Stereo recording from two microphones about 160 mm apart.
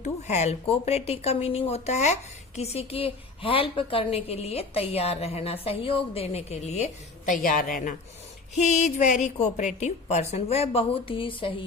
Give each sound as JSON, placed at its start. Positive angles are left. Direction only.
{"t": 0.0, "sound": "a woman's voice", "side_deg": 45}
{"t": 7.4, "sound": "a woman's voice", "side_deg": 60}
{"t": 8.5, "sound": "a woman's voice", "side_deg": 45}